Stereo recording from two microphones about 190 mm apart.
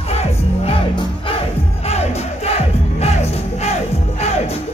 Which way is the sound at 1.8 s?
35° left (ahead or behind).